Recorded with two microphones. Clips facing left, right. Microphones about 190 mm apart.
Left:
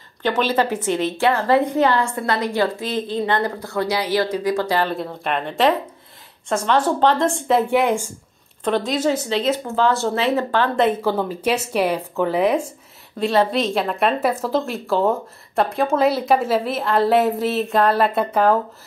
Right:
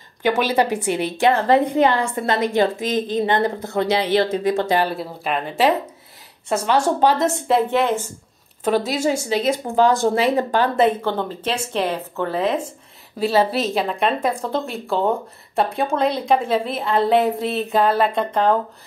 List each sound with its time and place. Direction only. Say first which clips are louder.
0.2 s a woman's voice: right 1 dB; 10° right (ahead or behind)
4.8 s speech: even; 5° right (ahead or behind)
7.6 s speech: left 1 dB; 10° left (ahead or behind)
8.6 s speech: even; 10° right (ahead or behind)
11.0 s speech: left 2 dB; 5° left (ahead or behind)
13.2 s speech: even; 5° right (ahead or behind)